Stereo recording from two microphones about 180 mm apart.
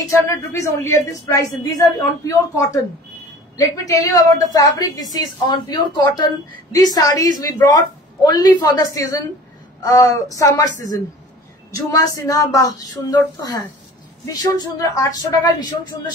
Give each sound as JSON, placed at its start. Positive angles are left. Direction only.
{"t": 0.1, "sound": "speech", "side_deg": 15}